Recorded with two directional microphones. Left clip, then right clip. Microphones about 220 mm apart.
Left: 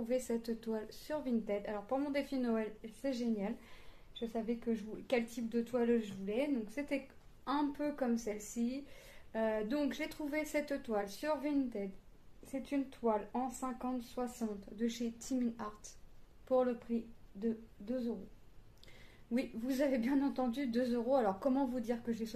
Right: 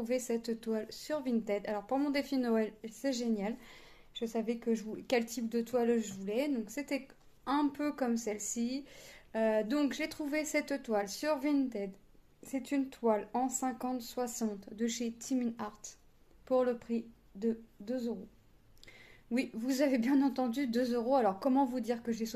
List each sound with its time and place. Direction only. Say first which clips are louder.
0.0 s speech: right 2 dB; 35° right (ahead or behind)
7.4 s speech: right 3 dB; 35° right (ahead or behind)
19.3 s speech: right 3 dB; 35° right (ahead or behind)